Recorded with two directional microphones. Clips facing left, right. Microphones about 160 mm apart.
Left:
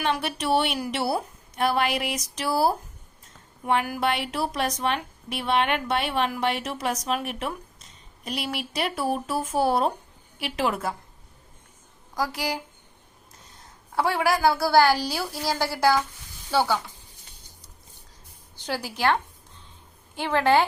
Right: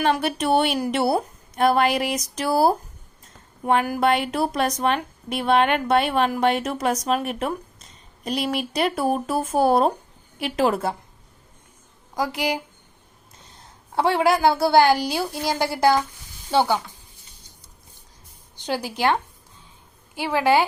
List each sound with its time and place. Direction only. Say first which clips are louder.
0.0 s a woman's voice: right 5 dB; 45° right (ahead or behind)
12.1 s a woman's voice: right 4 dB; 20° right (ahead or behind)
13.9 s a woman's voice: right 4 dB; 25° right (ahead or behind)
18.5 s a woman's voice: right 4 dB; 20° right (ahead or behind)